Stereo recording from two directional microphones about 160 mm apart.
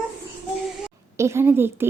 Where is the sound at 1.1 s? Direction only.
15° right (ahead or behind).